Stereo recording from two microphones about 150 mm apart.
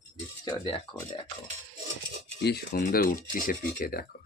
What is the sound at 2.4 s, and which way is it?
Speech, 90° left.